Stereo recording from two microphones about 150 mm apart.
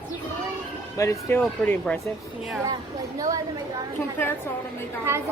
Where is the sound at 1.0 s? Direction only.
20° left (ahead or behind).